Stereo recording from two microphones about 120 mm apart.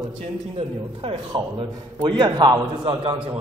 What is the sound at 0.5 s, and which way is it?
A man's voice, 45° right (ahead or behind).